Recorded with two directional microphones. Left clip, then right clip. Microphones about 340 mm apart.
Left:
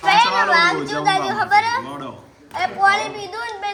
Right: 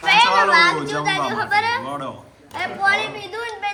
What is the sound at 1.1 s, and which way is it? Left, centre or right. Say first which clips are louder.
Speech: left 4 dB; left.